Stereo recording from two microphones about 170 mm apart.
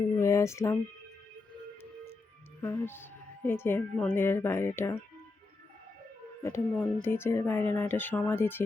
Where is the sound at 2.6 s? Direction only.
15° left (ahead or behind).